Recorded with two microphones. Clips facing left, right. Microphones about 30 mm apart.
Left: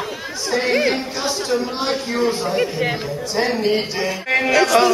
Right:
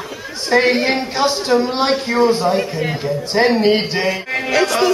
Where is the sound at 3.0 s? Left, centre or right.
Right.